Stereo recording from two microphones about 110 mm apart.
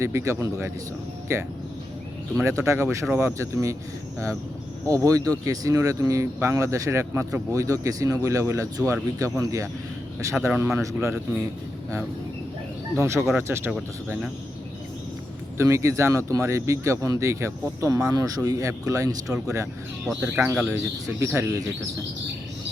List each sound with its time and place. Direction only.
0.0 s speech: 25° right (ahead or behind)
4.9 s speech: 30° right (ahead or behind)
13.0 s speech: 25° right (ahead or behind)
15.5 s speech: 25° right (ahead or behind)
20.2 s speech: 15° right (ahead or behind)